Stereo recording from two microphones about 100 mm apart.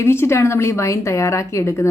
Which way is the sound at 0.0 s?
25° left (ahead or behind).